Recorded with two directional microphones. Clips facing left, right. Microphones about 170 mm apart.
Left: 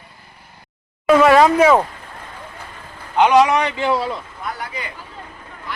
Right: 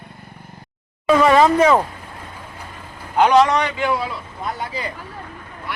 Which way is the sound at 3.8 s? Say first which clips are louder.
Left 2 dB; 30° left (ahead or behind).